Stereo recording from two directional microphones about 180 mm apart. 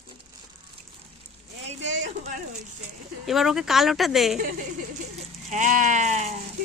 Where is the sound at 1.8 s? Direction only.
90° right.